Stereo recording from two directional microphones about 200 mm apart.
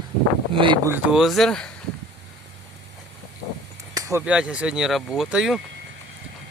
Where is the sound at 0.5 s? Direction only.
25° right (ahead or behind).